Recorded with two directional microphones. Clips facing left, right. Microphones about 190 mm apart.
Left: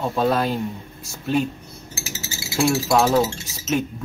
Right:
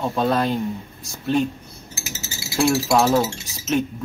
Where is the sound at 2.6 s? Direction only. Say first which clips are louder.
Right 1 dB; centre (ahead or behind).